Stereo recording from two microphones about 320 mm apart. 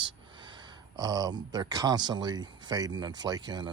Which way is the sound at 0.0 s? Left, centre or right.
Centre.